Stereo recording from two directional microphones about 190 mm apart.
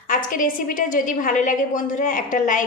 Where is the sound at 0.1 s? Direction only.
45° left (ahead or behind).